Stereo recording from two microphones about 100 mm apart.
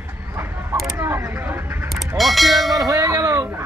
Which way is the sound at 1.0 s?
25° right (ahead or behind).